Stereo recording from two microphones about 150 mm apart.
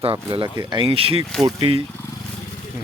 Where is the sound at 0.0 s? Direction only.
35° right (ahead or behind).